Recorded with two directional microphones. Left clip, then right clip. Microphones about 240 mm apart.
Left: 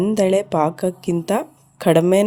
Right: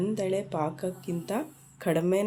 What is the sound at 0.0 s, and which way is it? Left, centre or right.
Speech, left.